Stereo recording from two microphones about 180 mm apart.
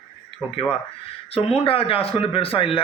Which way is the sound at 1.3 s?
35° left (ahead or behind).